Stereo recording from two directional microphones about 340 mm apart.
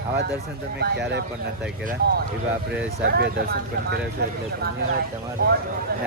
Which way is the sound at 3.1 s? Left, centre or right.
Right.